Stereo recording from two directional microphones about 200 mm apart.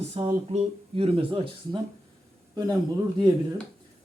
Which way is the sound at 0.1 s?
30° right (ahead or behind).